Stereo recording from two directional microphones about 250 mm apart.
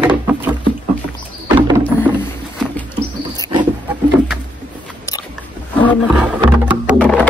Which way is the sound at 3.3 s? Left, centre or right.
Centre.